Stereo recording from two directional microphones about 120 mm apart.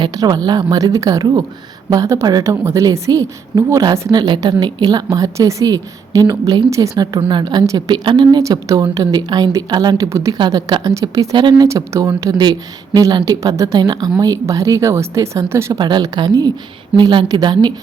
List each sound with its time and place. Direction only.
0.0 s a woman's voice: 35° right (ahead or behind)
8.4 s a woman's voice: 30° right (ahead or behind)
10.3 s a woman's voice: 40° right (ahead or behind); by 15.8 s 20° right (ahead or behind)
15.8 s speech: 35° right (ahead or behind)